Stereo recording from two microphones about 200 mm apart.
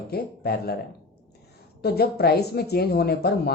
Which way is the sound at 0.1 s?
50° left (ahead or behind).